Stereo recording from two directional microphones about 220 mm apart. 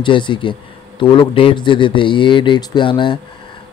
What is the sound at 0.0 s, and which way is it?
Speech, 20° left (ahead or behind).